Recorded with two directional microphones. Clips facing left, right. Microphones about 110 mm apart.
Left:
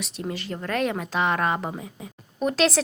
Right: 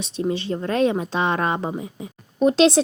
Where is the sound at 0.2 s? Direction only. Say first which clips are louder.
Right 8 dB; 25° right (ahead or behind).